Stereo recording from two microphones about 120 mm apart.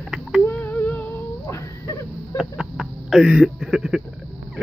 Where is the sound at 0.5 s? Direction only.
15° left (ahead or behind).